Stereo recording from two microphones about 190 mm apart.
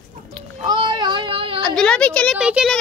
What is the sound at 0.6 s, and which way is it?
Child singing, 25° right (ahead or behind).